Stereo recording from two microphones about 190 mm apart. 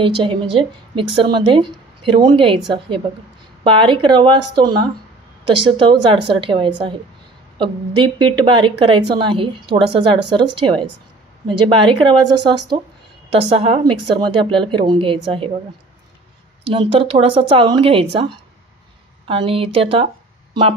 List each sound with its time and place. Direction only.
0.2 s a woman's voice: 25° right (ahead or behind)
16.7 s a woman's voice: 30° right (ahead or behind)
19.2 s a woman's voice: 30° right (ahead or behind)